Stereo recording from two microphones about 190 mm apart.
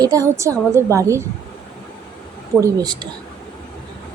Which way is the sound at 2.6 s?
20° right (ahead or behind).